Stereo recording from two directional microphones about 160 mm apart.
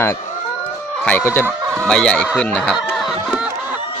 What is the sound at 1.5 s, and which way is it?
Chicken, 15° right (ahead or behind).